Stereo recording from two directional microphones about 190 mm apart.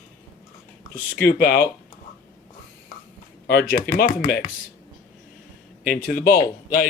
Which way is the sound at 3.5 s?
55° left (ahead or behind).